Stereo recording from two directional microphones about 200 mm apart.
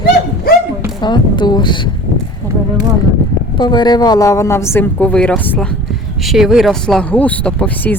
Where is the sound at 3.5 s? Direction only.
20° left (ahead or behind).